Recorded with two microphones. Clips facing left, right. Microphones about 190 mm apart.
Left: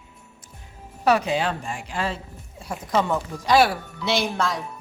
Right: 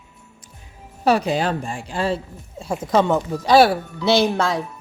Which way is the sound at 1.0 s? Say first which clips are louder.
Right 2 dB; 35° right (ahead or behind).